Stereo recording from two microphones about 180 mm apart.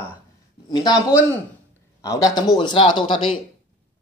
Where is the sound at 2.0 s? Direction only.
20° left (ahead or behind).